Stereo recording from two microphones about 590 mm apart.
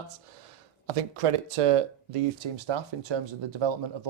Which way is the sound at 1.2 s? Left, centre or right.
Right.